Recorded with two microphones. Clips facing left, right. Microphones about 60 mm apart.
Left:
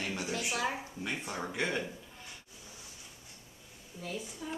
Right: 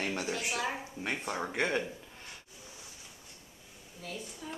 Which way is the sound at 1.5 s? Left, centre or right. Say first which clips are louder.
Right 2 dB; right.